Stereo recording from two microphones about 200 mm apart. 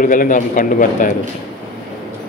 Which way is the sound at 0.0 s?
40° left (ahead or behind).